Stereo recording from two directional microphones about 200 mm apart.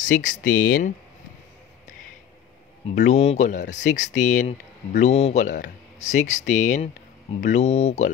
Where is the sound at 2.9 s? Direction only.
35° left (ahead or behind).